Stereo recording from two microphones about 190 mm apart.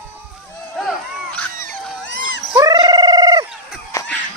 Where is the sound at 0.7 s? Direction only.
5° left (ahead or behind).